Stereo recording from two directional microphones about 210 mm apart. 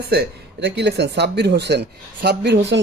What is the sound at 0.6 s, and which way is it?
Speech, 55° right (ahead or behind).